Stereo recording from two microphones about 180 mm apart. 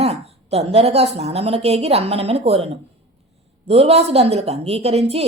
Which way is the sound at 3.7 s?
35° right (ahead or behind).